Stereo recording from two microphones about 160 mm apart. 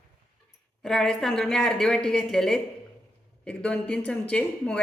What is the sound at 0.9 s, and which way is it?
A woman's voice, 5° left (ahead or behind).